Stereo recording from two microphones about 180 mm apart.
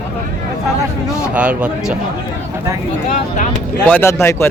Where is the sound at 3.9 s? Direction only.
15° left (ahead or behind).